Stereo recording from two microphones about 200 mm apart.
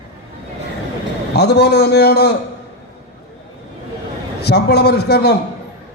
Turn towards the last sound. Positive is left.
turn(degrees=55)  # may be behind; listen again after turning